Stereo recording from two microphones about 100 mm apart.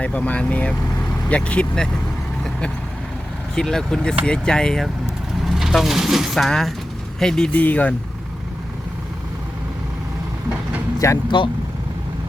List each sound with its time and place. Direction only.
0.0 s speech: 15° left (ahead or behind)
2.4 s vehicle: 5° left (ahead or behind)
3.5 s speech: 5° left (ahead or behind)
11.0 s speech: 30° left (ahead or behind)